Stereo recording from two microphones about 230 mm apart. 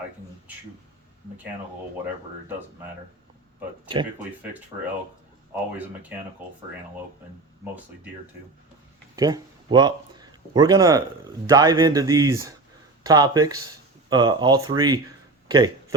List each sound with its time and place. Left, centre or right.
5.7 s speech: centre
9.1 s speech: centre
15.4 s a sound: centre